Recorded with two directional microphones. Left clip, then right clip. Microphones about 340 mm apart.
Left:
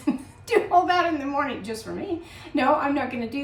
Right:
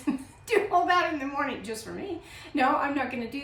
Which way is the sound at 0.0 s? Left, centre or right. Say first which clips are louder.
Left 4 dB; centre.